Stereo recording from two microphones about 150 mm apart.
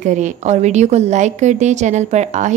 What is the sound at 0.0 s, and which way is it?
A woman's voice, 55° right (ahead or behind).